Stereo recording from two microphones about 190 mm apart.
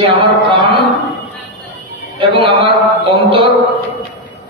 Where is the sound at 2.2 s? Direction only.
25° right (ahead or behind).